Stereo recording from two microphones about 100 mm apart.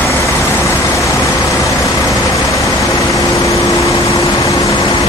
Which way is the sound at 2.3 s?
30° left (ahead or behind).